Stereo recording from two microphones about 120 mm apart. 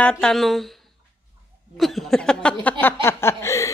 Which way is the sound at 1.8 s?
Centre (ahead or behind).